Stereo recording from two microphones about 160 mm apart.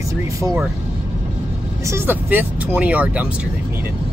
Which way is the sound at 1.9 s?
15° right (ahead or behind).